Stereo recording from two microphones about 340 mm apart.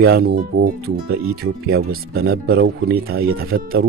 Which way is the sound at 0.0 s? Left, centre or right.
Right.